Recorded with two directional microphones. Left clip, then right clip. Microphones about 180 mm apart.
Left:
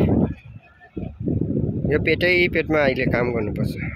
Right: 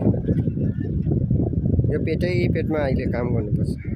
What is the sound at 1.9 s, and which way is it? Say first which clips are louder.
Speech: left 8 dB; 5° left (ahead or behind).